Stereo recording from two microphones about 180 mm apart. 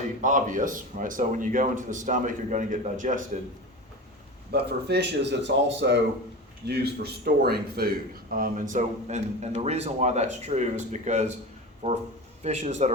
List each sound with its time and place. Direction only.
0.2 s a man's voice: 45° right (ahead or behind)
4.5 s speech: 70° right (ahead or behind)
6.7 s a man's voice: 65° right (ahead or behind); by 11.3 s 40° right (ahead or behind)
11.8 s a man's voice: 30° right (ahead or behind)